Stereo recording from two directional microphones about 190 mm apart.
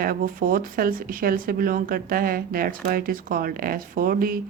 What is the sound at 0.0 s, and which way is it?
Speech, 50° right (ahead or behind).